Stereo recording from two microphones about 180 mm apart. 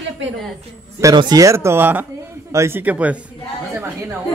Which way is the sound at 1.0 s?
20° right (ahead or behind).